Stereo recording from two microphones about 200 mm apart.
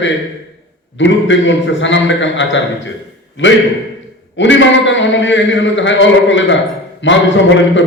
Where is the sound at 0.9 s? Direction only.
65° left (ahead or behind).